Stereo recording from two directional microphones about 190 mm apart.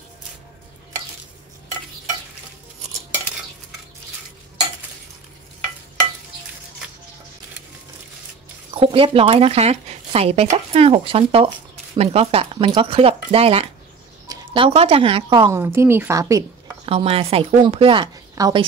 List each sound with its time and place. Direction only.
8.7 s speech: 30° right (ahead or behind)
15.6 s speech: 15° right (ahead or behind)
16.8 s speech: 30° right (ahead or behind)